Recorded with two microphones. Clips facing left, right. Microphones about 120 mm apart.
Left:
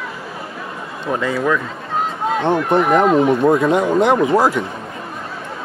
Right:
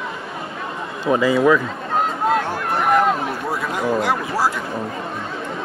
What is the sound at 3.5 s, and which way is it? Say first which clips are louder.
Speech: left 7 dB; 20° left (ahead or behind).